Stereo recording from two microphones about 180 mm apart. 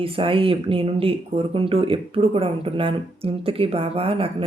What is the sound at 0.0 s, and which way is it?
Speech, 30° right (ahead or behind).